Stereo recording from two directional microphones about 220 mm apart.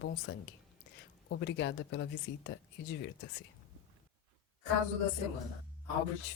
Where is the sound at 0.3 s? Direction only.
55° left (ahead or behind).